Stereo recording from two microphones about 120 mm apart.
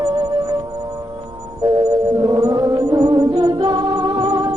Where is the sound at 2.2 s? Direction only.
30° right (ahead or behind).